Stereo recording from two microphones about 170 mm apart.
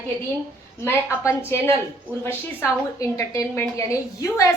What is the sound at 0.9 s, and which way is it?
Speech, 15° left (ahead or behind).